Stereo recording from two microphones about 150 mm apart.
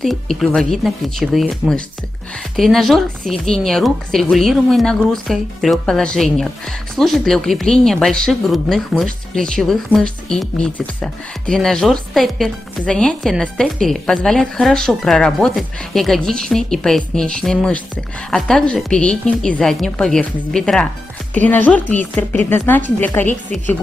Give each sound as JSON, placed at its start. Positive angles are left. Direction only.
{"t": 0.0, "sound": "speech", "side_deg": 0}